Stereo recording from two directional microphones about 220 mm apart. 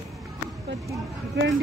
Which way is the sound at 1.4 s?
55° right (ahead or behind).